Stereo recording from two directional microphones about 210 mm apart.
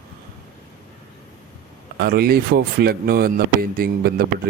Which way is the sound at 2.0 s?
45° right (ahead or behind).